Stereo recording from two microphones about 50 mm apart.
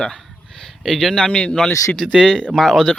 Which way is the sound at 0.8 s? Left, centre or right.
Centre.